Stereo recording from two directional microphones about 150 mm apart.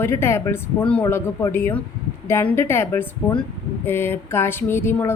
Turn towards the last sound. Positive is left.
turn(degrees=15)  # may be behind; listen again after turning